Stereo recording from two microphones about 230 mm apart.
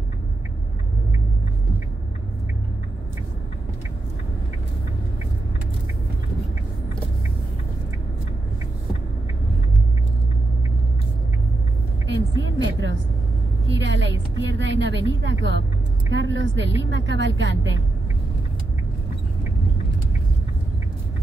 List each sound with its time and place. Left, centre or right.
12.4 s a sound: right
13.7 s vehicle: right
16.1 s a woman's voice: right